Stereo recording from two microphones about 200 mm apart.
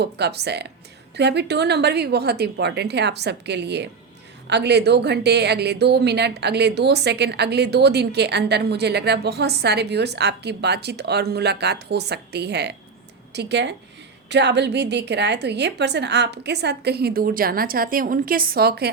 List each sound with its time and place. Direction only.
0.0 s a woman's voice: 55° right (ahead or behind)